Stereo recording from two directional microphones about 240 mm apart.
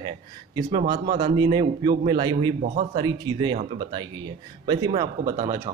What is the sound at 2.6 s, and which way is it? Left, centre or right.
Speech, right.